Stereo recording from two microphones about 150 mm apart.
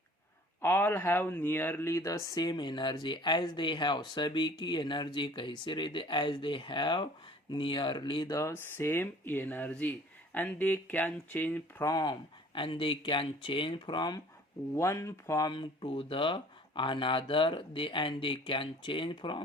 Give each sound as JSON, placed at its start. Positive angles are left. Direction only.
{"t": 0.6, "sound": "speech", "side_deg": 15}
{"t": 8.3, "sound": "speech", "side_deg": 20}
{"t": 11.9, "sound": "speech", "side_deg": 25}
{"t": 14.8, "sound": "speech", "side_deg": 20}